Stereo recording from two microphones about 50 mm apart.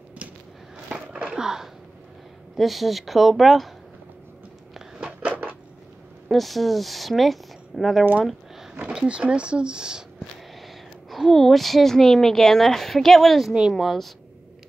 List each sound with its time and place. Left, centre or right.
0.8 s a sound: centre
2.5 s a woman's voice: centre
5.2 s a sound: right
6.2 s a woman's voice: centre
8.9 s speech: right
11.1 s a woman's voice: centre
13.5 s speech: centre
13.7 s a woman's voice: centre